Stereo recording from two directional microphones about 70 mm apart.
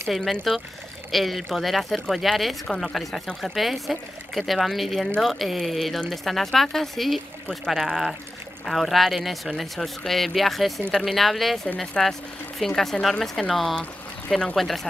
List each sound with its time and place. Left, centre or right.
0.1 s speech: centre
7.8 s speech: centre